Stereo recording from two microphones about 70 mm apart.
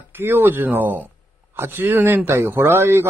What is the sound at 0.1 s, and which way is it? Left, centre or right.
A man's voice, right.